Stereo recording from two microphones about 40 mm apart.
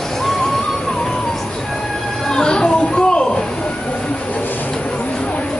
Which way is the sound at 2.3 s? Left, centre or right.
Centre.